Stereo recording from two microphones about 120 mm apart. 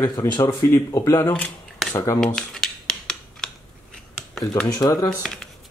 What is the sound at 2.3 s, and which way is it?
Cutlery, 5° left (ahead or behind).